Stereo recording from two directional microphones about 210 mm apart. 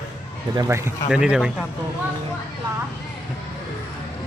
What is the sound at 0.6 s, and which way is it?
Speech, 15° right (ahead or behind).